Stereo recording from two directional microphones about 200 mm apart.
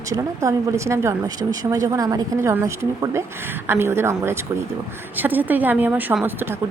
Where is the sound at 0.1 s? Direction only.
15° right (ahead or behind).